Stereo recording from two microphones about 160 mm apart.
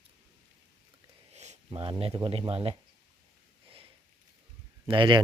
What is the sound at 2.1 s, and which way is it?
Speech, 30° right (ahead or behind).